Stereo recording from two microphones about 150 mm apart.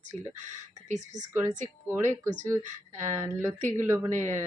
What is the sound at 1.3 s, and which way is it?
Speech, 20° right (ahead or behind).